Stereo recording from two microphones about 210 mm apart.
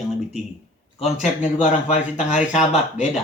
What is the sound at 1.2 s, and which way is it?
Speech, 35° left (ahead or behind).